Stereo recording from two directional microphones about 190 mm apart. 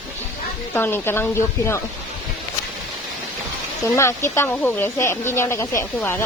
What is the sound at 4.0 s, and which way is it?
Speech, 15° left (ahead or behind).